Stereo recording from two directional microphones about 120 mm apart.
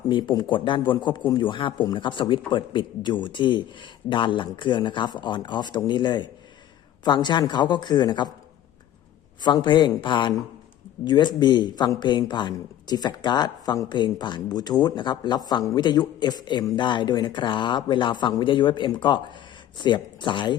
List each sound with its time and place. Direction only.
0.1 s speech: 40° left (ahead or behind)
9.4 s speech: 40° left (ahead or behind)